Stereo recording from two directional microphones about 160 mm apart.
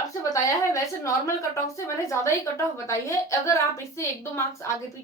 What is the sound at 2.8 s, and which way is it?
Speech, 20° left (ahead or behind).